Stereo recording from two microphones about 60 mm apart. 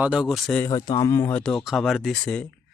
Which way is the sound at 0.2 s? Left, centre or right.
Centre.